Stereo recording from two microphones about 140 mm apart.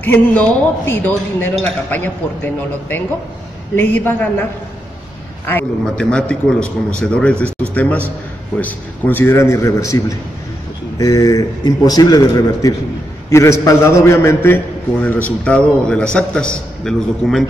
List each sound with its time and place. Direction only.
0.0 s a man's voice: 10° left (ahead or behind)
5.9 s a man's voice: 5° left (ahead or behind)